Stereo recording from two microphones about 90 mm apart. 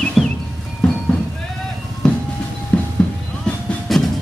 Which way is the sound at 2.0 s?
10° left (ahead or behind).